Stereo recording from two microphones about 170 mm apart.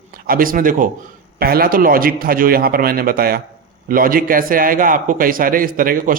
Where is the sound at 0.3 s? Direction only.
55° right (ahead or behind).